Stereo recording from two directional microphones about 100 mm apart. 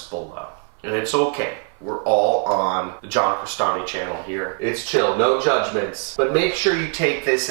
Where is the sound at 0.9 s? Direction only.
15° right (ahead or behind).